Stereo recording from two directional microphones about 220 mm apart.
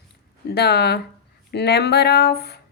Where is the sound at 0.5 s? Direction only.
50° left (ahead or behind).